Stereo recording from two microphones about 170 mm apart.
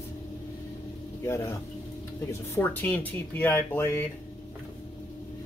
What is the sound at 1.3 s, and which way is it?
Speech, 15° left (ahead or behind).